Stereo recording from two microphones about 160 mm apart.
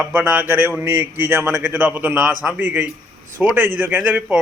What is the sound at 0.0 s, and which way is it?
A man's voice, 10° right (ahead or behind).